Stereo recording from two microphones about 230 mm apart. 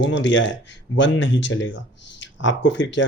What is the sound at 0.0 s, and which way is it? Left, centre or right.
Speech, left.